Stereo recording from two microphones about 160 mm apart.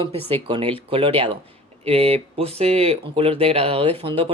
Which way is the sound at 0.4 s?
35° right (ahead or behind).